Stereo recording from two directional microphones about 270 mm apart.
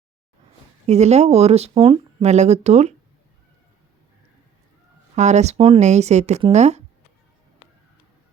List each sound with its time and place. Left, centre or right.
0.9 s speech: right
5.1 s speech: right